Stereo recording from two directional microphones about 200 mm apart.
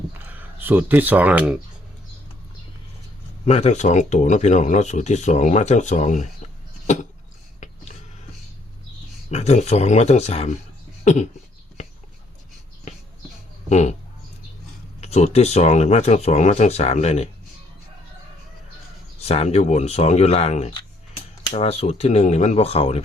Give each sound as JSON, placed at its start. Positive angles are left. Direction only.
{"t": 0.3, "sound": "speech", "side_deg": -10}
{"t": 3.4, "sound": "speech", "side_deg": 35}
{"t": 6.8, "sound": "a sound", "side_deg": 40}
{"t": 9.3, "sound": "speech", "side_deg": 35}
{"t": 11.0, "sound": "a sound", "side_deg": 35}
{"t": 13.7, "sound": "speech", "side_deg": 35}
{"t": 15.0, "sound": "speech", "side_deg": 30}
{"t": 19.2, "sound": "speech", "side_deg": 30}